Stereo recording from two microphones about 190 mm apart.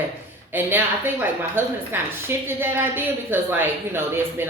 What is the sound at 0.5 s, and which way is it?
A woman's voice, 10° right (ahead or behind).